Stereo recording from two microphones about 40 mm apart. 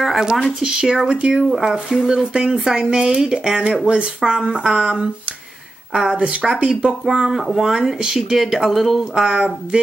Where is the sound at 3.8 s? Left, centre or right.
Right.